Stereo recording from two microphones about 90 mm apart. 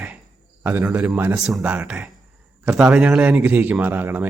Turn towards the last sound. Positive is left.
turn(degrees=-20)  # may be behind; listen again after turning